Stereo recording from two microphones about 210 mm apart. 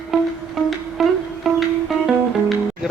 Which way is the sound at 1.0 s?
Centre (ahead or behind).